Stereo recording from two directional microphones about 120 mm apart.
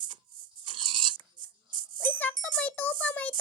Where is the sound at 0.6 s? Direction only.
45° right (ahead or behind).